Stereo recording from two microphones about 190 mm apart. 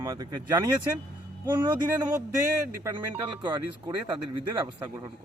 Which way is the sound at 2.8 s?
25° right (ahead or behind).